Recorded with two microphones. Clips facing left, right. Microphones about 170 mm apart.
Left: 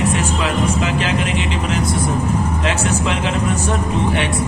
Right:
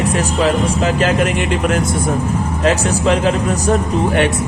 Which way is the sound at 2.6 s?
40° right (ahead or behind).